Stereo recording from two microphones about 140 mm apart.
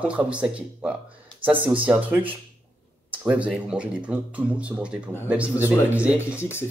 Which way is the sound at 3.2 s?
10° right (ahead or behind).